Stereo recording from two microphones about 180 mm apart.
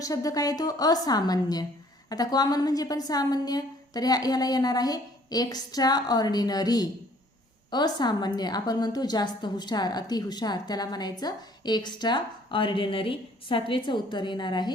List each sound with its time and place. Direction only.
0.0 s a woman's voice: 20° left (ahead or behind)